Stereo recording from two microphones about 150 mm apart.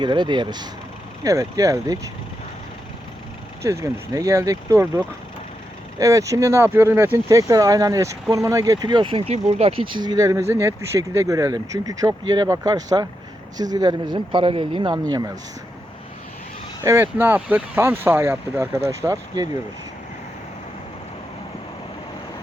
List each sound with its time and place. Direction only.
0.0 s speech: 30° right (ahead or behind)
3.6 s speech: 20° right (ahead or behind)
16.8 s speech: 15° right (ahead or behind)